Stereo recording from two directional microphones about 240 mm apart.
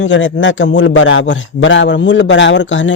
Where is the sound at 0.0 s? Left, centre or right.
Left.